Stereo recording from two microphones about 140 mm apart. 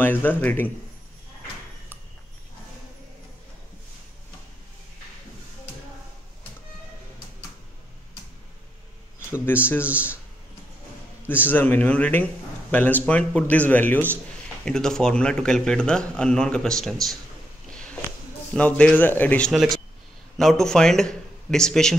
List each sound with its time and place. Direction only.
0.0 s speech: 15° left (ahead or behind)
9.5 s speech: 15° left (ahead or behind)
11.2 s speech: 15° left (ahead or behind)
17.6 s a sound: 5° left (ahead or behind)
18.5 s a man's voice: 10° left (ahead or behind)